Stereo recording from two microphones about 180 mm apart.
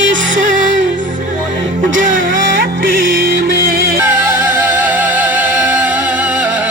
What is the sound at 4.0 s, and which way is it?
Music, 10° right (ahead or behind).